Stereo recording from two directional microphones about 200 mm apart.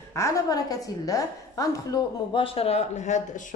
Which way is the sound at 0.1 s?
15° left (ahead or behind).